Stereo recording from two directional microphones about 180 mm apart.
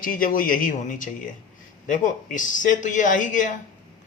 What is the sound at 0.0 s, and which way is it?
Speech, 50° left (ahead or behind).